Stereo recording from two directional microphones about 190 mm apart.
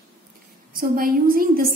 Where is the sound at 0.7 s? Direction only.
50° right (ahead or behind).